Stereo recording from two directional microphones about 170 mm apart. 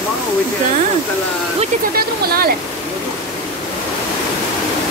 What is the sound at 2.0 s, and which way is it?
Speech, 60° right (ahead or behind).